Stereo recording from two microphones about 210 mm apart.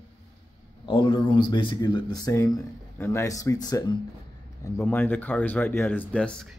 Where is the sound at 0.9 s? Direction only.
20° left (ahead or behind).